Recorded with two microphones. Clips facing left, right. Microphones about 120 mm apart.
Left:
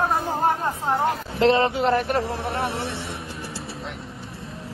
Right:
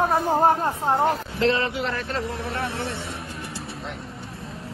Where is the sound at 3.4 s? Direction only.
Centre (ahead or behind).